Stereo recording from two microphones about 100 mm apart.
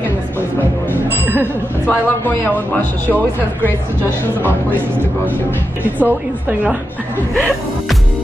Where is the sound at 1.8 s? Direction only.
15° left (ahead or behind).